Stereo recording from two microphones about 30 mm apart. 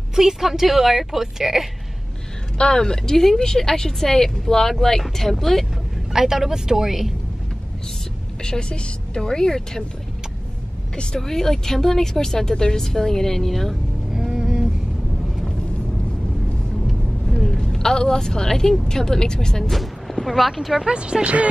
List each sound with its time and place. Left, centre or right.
0.1 s a woman's voice: centre
2.5 s speech: left
2.8 s a woman's voice: centre
5.3 s speech: centre
6.1 s a woman's voice: centre
8.5 s a woman's voice: left
11.1 s speech: centre
14.1 s vehicle: centre
17.6 s a woman's voice: left
19.7 s speech: centre
20.8 s speech: right